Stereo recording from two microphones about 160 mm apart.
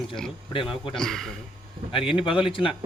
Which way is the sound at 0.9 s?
5° left (ahead or behind).